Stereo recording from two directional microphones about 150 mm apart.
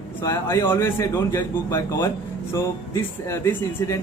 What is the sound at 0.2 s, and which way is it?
Speech, 20° left (ahead or behind).